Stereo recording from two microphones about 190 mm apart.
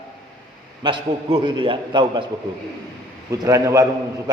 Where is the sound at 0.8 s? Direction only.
25° right (ahead or behind).